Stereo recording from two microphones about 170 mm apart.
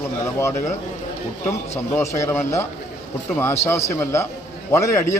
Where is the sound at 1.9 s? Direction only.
15° left (ahead or behind).